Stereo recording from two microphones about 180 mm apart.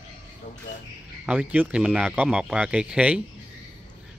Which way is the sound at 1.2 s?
5° right (ahead or behind).